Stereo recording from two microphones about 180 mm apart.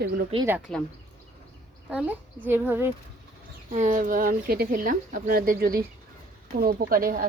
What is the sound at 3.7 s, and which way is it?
Speech, 45° right (ahead or behind).